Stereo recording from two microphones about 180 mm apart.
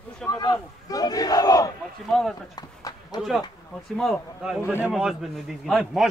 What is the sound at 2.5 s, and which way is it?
Run, 20° left (ahead or behind).